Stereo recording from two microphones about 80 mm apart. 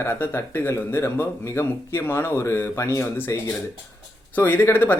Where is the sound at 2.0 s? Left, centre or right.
Left.